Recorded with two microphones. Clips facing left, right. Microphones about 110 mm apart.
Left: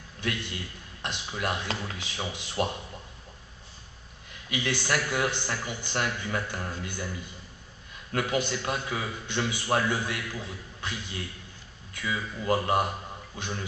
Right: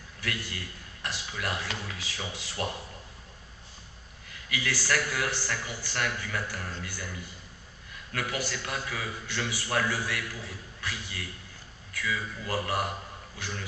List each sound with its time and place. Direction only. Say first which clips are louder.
0.2 s a man's voice: left 3 dB; 20° left (ahead or behind)
4.5 s a man's voice: left 2 dB; 20° left (ahead or behind)
8.1 s a man's voice: left 5 dB; 25° left (ahead or behind)